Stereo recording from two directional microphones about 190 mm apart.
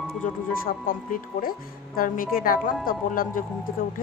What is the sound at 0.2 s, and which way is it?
A woman's voice, 45° left (ahead or behind).